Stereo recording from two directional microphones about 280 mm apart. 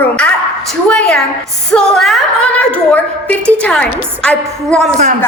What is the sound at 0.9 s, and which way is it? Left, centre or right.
A woman's voice, centre.